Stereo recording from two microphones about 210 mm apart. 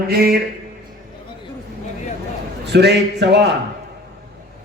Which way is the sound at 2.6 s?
55° right (ahead or behind).